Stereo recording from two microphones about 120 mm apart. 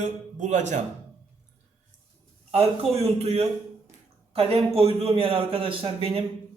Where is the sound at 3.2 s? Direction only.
60° right (ahead or behind).